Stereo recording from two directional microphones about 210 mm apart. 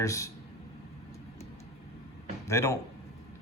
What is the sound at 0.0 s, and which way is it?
Speech, 15° left (ahead or behind).